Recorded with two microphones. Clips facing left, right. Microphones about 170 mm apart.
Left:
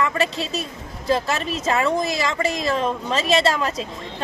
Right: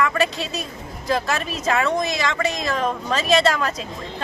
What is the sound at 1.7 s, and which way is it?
A woman's voice, 30° left (ahead or behind).